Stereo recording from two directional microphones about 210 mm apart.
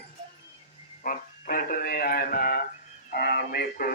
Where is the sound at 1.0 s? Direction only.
40° left (ahead or behind).